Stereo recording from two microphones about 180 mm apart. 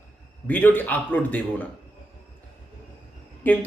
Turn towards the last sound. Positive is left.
turn(degrees=10)  # may be behind; listen again after turning